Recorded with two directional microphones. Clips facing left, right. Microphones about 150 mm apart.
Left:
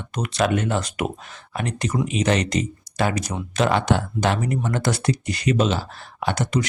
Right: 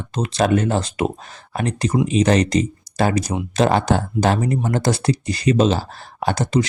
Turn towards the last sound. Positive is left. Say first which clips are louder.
# right 4 dB
turn(degrees=-30)  # may be behind; listen again after turning